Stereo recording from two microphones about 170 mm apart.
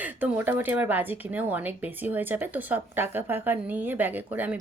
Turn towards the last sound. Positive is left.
turn(degrees=-10)  # may be behind; listen again after turning